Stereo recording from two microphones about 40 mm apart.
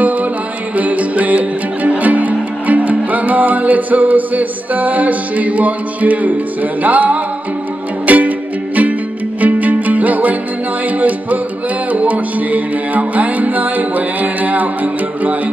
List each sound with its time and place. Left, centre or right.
0.0 s music: right